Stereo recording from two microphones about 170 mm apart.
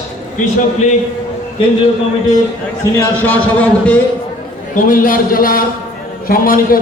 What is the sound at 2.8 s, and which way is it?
A man's voice, 20° left (ahead or behind).